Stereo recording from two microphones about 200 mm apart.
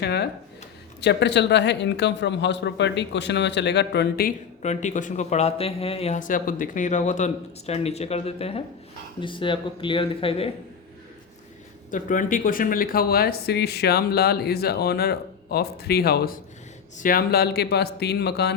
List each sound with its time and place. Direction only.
0.0 s speech: 55° left (ahead or behind); by 10.5 s 30° left (ahead or behind)
11.9 s speech: 40° left (ahead or behind)